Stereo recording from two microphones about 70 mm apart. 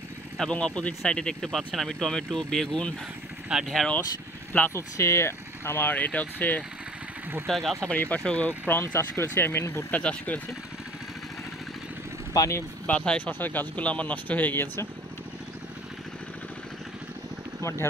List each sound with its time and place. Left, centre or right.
0.4 s speech: centre
3.4 s speech: centre
4.5 s speech: left
4.7 s speech: left
7.4 s speech: centre
7.9 s speech: left
9.8 s speech: left
12.4 s speech: left
12.8 s speech: centre
13.3 s speech: left